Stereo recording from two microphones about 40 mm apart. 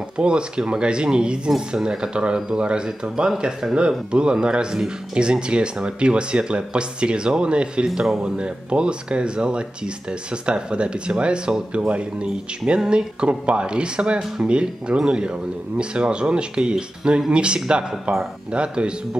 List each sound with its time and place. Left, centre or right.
0.2 s speech: right